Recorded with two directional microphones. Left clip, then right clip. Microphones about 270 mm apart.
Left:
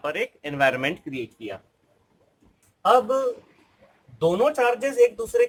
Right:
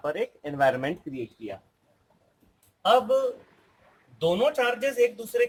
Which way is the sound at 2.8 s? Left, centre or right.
Centre.